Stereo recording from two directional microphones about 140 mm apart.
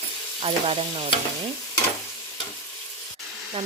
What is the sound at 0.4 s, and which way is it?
Frying, 40° right (ahead or behind).